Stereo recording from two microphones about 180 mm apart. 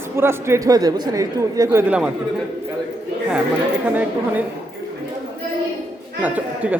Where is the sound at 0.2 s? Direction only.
15° right (ahead or behind).